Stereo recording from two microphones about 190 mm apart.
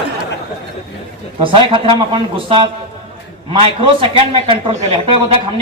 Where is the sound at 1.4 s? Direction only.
25° right (ahead or behind).